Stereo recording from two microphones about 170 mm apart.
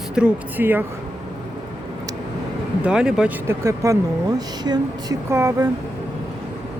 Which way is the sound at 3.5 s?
20° right (ahead or behind).